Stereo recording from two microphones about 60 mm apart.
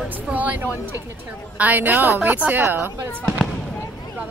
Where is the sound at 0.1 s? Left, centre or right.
Right.